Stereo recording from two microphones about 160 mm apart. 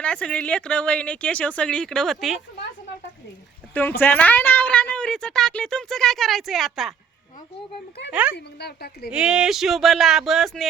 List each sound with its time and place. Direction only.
0.0 s speech: 5° left (ahead or behind)
3.8 s a woman's voice: 10° left (ahead or behind)
8.1 s a child's voice: 10° right (ahead or behind)
8.4 s a woman's voice: 90° left
9.0 s a woman's voice: 5° right (ahead or behind)